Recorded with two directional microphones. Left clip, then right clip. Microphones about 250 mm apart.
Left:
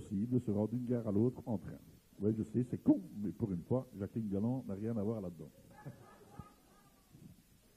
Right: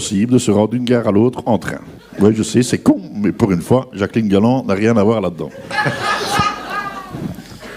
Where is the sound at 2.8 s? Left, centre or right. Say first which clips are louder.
Right 18 dB; centre.